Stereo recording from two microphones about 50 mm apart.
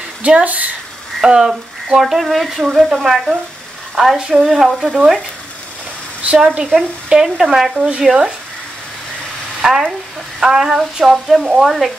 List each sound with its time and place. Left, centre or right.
0.2 s speech: right
1.2 s speech: centre
3.9 s frying: centre
4.2 s speech: centre
6.2 s speech: centre
9.6 s a woman's voice: centre